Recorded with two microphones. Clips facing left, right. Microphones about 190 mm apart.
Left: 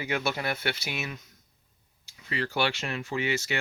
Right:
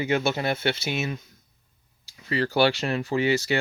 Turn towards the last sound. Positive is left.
turn(degrees=-35)  # may be behind; listen again after turning